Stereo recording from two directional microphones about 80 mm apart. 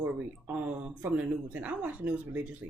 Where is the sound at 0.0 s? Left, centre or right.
Right.